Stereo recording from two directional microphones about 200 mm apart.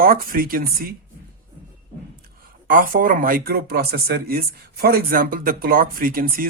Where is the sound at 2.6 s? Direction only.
45° right (ahead or behind).